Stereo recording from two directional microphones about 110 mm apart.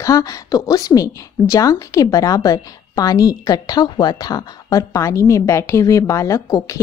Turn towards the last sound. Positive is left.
turn(degrees=30)  # may be behind; listen again after turning